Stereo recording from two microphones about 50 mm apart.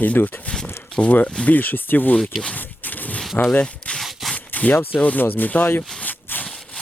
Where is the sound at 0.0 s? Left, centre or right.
Left.